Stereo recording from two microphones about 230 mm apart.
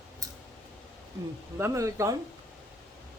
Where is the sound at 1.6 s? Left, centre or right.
Centre.